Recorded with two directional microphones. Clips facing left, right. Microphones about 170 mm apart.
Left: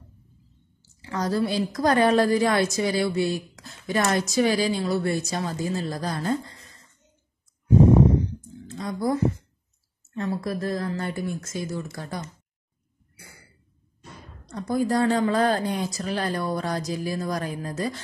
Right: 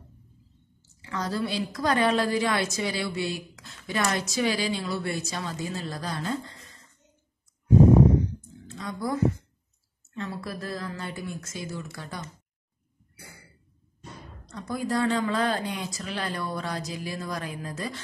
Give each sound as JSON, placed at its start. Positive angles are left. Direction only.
{"t": 1.0, "sound": "a woman's voice", "side_deg": 40}
{"t": 8.6, "sound": "a sound", "side_deg": 35}
{"t": 10.1, "sound": "a woman's voice", "side_deg": 40}
{"t": 11.0, "sound": "a woman's voice", "side_deg": 50}
{"t": 14.5, "sound": "a woman's voice", "side_deg": 40}